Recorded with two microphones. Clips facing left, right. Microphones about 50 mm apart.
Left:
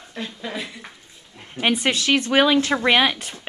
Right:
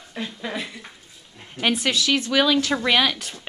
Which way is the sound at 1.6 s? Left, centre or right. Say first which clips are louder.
Left 2 dB; centre.